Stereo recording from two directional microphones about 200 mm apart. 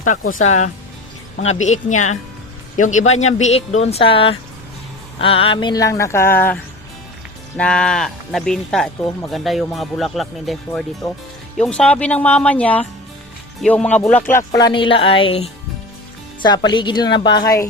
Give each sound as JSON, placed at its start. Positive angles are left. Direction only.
{"t": 0.3, "sound": "speech", "side_deg": 35}